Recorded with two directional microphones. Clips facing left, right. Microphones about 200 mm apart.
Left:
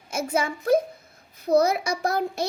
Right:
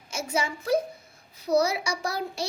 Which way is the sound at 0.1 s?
55° left (ahead or behind).